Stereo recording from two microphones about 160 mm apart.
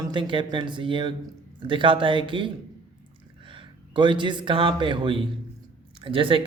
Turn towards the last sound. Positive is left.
turn(degrees=-35)  # may be behind; listen again after turning